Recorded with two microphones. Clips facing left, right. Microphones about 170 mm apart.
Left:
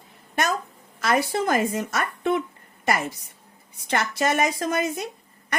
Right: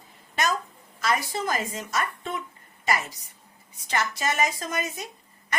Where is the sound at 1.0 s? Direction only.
55° left (ahead or behind).